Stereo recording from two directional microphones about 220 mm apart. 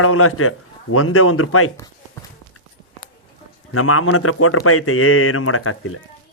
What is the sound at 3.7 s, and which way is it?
A man's voice, 80° left.